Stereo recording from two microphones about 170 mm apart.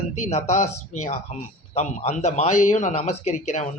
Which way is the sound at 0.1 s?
40° left (ahead or behind).